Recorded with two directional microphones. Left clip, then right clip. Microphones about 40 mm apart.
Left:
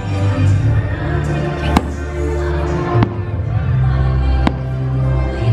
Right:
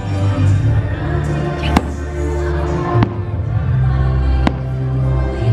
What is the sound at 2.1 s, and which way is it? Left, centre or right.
Music, left.